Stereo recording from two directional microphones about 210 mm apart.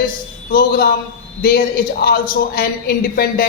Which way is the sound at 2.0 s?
45° left (ahead or behind).